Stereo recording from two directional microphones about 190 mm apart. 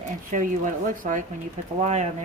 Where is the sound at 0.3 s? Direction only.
45° right (ahead or behind).